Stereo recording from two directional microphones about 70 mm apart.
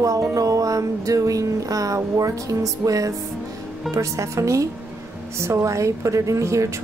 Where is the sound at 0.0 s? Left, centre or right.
Right.